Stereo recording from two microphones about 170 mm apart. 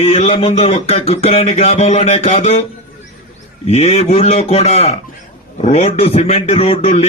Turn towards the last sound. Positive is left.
turn(degrees=35)  # may be behind; listen again after turning